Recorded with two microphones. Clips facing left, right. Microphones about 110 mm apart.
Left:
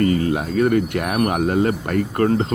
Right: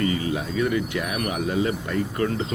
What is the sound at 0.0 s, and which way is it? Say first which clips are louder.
Speech: left 6 dB; 50° left (ahead or behind).